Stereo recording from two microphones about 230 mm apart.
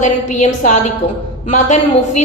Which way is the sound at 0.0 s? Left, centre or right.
Left.